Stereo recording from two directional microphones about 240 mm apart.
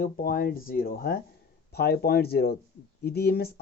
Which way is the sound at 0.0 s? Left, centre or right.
Left.